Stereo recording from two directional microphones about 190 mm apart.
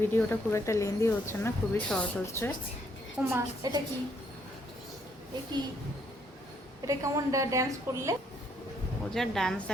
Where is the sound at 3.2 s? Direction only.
10° right (ahead or behind).